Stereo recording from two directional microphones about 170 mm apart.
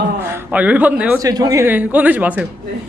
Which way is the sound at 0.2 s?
15° right (ahead or behind).